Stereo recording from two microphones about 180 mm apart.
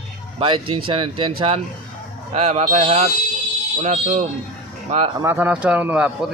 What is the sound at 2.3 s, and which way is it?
A man's voice, 35° right (ahead or behind).